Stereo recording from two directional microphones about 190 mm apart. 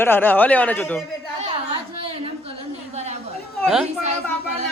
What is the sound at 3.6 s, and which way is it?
Speech, 5° right (ahead or behind).